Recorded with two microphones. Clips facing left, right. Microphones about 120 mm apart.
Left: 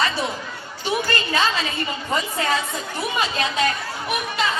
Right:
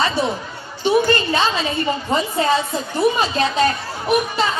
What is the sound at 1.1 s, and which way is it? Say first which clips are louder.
A woman's voice: right 3 dB; 25° right (ahead or behind).